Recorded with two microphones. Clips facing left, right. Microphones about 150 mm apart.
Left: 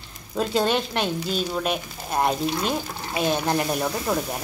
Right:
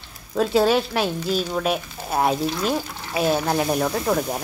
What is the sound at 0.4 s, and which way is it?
A woman's voice, 5° right (ahead or behind).